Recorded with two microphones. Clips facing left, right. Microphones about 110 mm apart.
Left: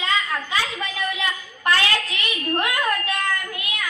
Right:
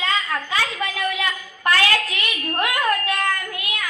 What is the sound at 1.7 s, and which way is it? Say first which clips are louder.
A woman's voice: right 2 dB; 25° left (ahead or behind).